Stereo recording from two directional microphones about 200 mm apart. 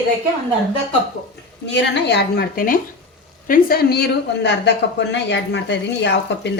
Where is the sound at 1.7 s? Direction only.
60° left (ahead or behind).